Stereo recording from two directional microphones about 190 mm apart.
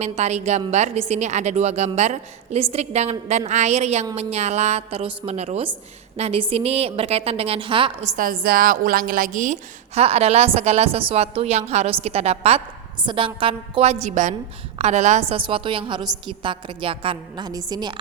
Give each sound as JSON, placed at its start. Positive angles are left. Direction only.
{"t": 0.0, "sound": "a woman's voice", "side_deg": -35}
{"t": 8.1, "sound": "a woman's voice", "side_deg": -50}